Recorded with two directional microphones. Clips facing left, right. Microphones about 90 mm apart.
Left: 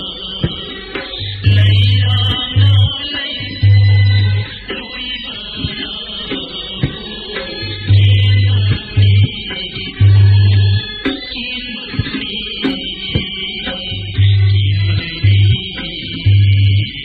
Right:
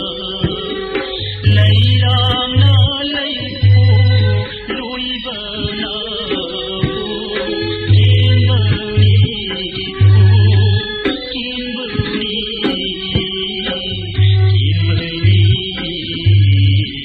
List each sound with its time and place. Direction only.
2.1 s music: 40° right (ahead or behind)
12.4 s music: 50° right (ahead or behind)